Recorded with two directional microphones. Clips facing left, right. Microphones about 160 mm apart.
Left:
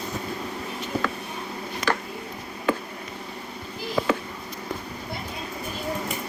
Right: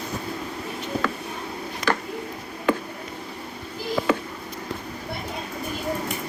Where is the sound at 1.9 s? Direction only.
65° right (ahead or behind).